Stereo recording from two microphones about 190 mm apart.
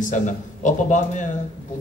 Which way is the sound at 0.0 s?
40° left (ahead or behind).